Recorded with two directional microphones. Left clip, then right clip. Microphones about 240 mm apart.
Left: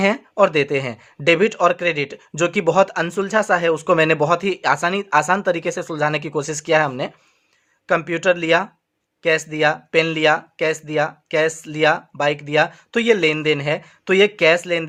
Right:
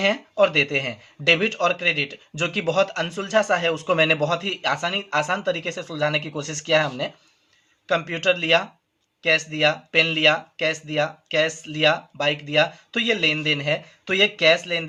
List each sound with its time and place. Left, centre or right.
0.0 s speech: left